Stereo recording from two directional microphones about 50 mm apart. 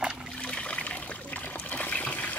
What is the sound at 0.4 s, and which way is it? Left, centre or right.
Trickle, left.